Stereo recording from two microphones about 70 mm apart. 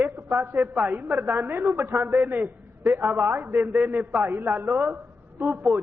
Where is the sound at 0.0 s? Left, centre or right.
Right.